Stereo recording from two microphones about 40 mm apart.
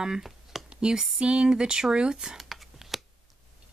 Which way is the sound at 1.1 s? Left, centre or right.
Right.